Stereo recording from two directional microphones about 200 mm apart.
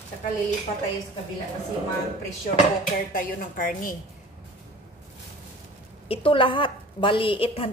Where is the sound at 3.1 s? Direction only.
45° left (ahead or behind).